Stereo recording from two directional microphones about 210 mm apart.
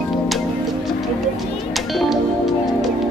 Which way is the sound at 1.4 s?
Centre (ahead or behind).